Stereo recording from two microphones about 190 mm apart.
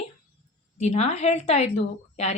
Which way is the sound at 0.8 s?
35° left (ahead or behind).